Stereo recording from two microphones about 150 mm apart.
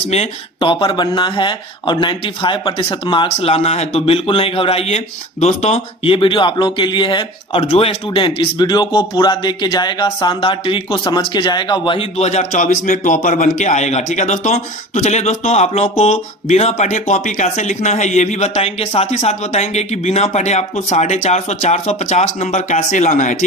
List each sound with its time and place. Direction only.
0.1 s speech: 40° left (ahead or behind); by 23.4 s 55° left (ahead or behind)